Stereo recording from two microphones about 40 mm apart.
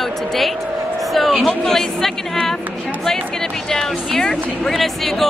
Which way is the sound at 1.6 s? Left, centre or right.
Centre.